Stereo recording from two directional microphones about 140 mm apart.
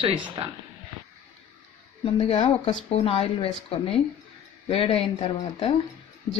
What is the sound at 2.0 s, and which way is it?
Speech, 40° left (ahead or behind).